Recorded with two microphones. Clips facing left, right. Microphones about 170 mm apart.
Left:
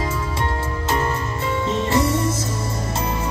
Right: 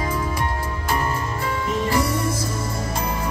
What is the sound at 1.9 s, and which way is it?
Music, 25° left (ahead or behind).